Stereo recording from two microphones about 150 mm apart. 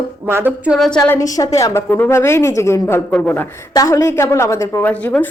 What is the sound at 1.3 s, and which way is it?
Speech, 20° left (ahead or behind).